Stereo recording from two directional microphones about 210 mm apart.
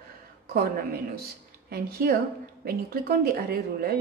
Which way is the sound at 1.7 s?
45° right (ahead or behind).